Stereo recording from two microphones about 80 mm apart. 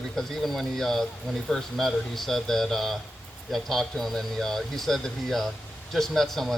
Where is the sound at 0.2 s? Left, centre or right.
Centre.